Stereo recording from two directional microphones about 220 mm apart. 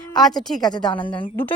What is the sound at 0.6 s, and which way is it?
Speech, 20° left (ahead or behind).